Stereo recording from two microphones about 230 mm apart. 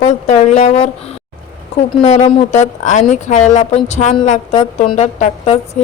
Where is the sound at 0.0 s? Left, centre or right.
Left.